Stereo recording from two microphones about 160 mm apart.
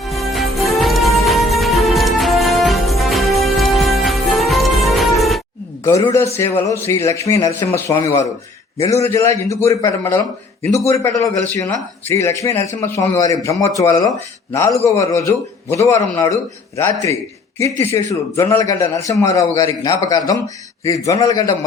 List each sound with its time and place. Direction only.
0.0 s music: centre (ahead or behind)
5.8 s a man's voice: 20° left (ahead or behind)
11.4 s a man's voice: 20° left (ahead or behind)